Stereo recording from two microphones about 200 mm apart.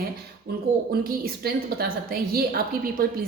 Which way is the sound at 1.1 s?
50° right (ahead or behind).